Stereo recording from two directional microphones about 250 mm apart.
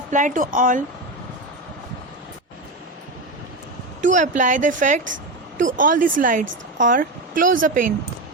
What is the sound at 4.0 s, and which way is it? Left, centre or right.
Speech, right.